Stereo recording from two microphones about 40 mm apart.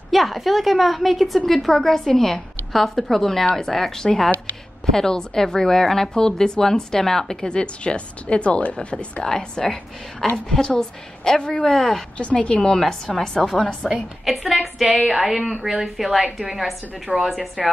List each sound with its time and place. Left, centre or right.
0.1 s a woman's voice: centre
7.4 s a woman's voice: left
9.2 s a woman's voice: centre
11.7 s a woman's voice: centre
12.2 s a woman's voice: left
13.0 s a woman's voice: centre
14.2 s a woman's voice: centre